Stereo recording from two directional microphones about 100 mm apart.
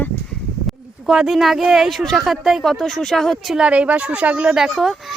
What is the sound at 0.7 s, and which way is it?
Speech, 5° right (ahead or behind).